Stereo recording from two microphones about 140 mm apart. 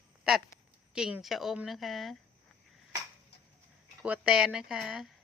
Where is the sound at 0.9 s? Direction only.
5° right (ahead or behind).